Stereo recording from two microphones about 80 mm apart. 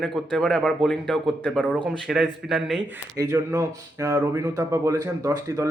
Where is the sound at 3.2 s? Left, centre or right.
Right.